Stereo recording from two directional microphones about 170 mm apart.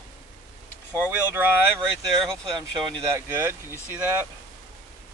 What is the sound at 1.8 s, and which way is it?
Speech, 5° left (ahead or behind).